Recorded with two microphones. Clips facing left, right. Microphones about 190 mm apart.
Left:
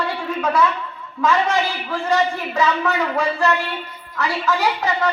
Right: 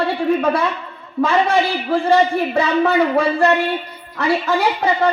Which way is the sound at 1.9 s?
30° right (ahead or behind).